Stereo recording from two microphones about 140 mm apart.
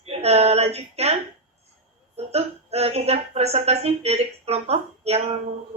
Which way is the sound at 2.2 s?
50° right (ahead or behind).